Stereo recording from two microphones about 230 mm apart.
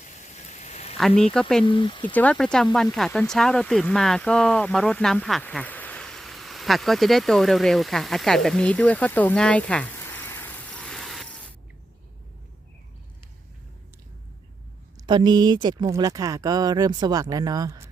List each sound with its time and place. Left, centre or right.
0.0 s a sound: left
0.9 s speech: centre
1.6 s speech: left
2.1 s speech: centre
14.9 s speech: centre